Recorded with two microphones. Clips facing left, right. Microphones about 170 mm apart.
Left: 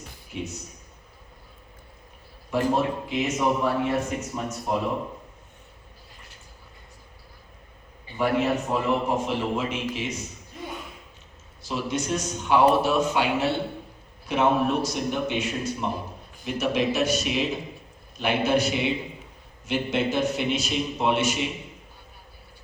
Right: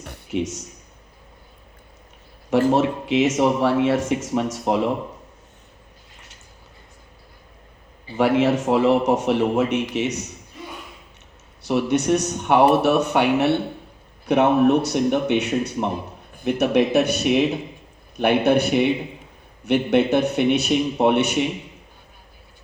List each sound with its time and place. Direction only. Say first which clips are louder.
0.0 s a sound: right 9 dB; 70° right (ahead or behind)
2.5 s speech: right 6 dB; 85° right
8.1 s speech: right 6 dB; 90° right; by 10.2 s 75° right (ahead or behind)
11.6 s speech: right 8 dB; 65° right (ahead or behind)